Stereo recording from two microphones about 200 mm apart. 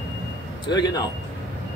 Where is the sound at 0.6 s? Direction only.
20° left (ahead or behind).